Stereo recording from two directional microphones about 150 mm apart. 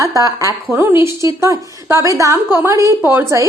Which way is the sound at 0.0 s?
20° right (ahead or behind).